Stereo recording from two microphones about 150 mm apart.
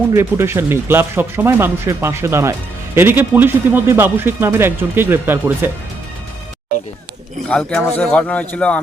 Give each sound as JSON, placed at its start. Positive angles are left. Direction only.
{"t": 0.1, "sound": "speech", "side_deg": -15}
{"t": 7.4, "sound": "speech", "side_deg": 5}